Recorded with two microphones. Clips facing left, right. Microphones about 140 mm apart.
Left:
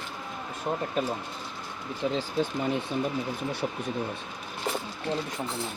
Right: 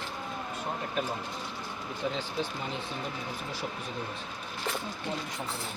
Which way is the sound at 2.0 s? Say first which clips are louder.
Left 5 dB; 25° left (ahead or behind).